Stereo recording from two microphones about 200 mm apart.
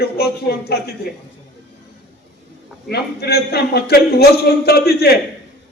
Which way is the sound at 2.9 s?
55° left (ahead or behind).